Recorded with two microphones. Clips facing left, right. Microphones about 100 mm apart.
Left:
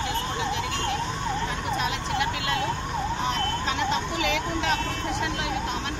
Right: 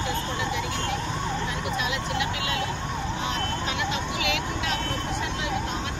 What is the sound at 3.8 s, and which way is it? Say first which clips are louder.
Vehicle: left 2 dB; 45° left (ahead or behind).